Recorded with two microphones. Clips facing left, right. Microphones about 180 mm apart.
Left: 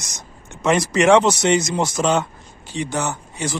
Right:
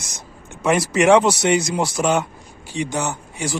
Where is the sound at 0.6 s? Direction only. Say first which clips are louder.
Even; 10° right (ahead or behind).